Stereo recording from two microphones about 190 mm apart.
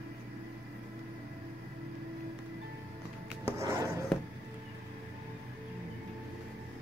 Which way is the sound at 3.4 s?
15° right (ahead or behind).